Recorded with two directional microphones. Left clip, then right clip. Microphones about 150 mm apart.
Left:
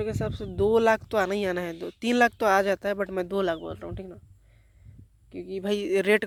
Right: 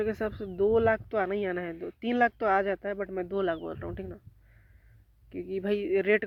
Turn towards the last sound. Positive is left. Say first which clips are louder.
# left 3 dB
turn(degrees=45)  # may be behind; listen again after turning